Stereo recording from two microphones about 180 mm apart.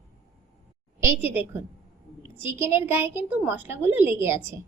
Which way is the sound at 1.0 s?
15° right (ahead or behind).